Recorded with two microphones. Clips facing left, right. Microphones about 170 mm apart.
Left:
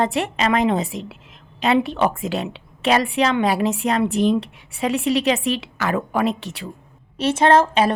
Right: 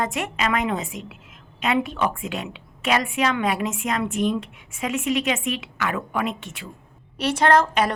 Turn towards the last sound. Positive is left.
turn(degrees=25)  # may be behind; listen again after turning